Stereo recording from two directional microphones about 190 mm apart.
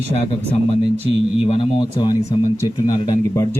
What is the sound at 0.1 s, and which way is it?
Speech, 35° left (ahead or behind).